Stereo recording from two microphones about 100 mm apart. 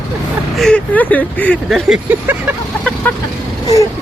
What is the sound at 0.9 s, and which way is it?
Speech, 15° left (ahead or behind).